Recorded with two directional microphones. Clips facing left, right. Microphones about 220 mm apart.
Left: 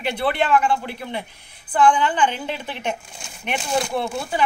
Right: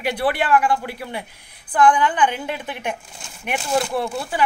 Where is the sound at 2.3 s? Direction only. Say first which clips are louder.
Right 1 dB; 10° right (ahead or behind).